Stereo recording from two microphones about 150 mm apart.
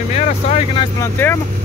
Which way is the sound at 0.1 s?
45° left (ahead or behind).